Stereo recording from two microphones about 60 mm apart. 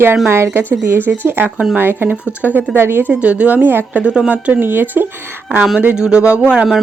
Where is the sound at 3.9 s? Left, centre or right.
Right.